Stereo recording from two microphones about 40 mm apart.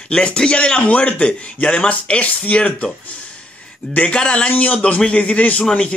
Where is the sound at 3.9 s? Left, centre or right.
Left.